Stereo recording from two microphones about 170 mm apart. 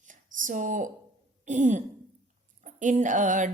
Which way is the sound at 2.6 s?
45° right (ahead or behind).